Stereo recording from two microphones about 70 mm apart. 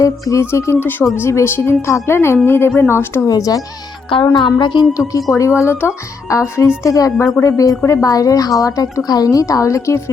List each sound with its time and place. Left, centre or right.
0.0 s speech: left
3.2 s a woman's voice: left
4.2 s a woman's voice: left
5.3 s speech: left
5.6 s speech: left
6.2 s a woman's voice: left